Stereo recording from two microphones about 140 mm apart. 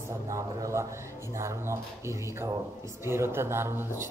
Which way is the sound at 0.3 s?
25° right (ahead or behind).